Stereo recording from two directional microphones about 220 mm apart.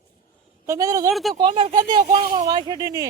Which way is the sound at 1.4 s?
25° right (ahead or behind).